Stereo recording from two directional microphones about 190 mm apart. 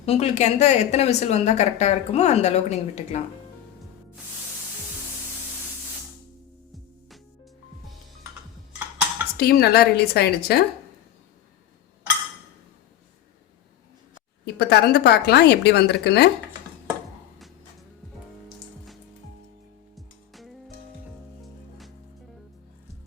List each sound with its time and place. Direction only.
0.0 s a woman's voice: 35° left (ahead or behind)
9.4 s a woman's voice: 55° left (ahead or behind)
14.4 s a woman's voice: 60° left (ahead or behind)
20.0 s music: centre (ahead or behind)